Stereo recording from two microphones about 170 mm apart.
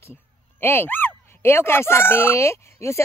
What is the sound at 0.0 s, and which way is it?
Speech, 15° left (ahead or behind).